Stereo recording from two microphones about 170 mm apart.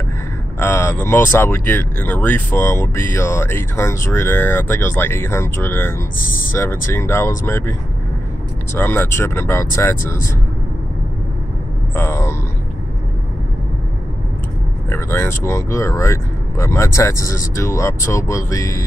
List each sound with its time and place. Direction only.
0.6 s speech: 10° left (ahead or behind)
8.7 s speech: 10° left (ahead or behind)
11.9 s a sound: 15° left (ahead or behind)
14.9 s speech: 15° left (ahead or behind)